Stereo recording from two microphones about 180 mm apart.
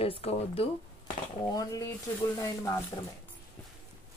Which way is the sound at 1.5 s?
20° left (ahead or behind).